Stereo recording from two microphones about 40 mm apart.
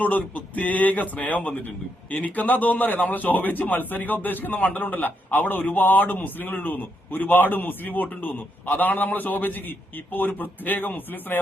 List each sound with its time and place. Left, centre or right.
0.0 s a man's voice: left